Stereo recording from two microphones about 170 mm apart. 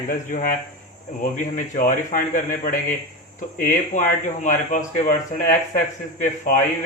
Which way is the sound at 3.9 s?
45° left (ahead or behind).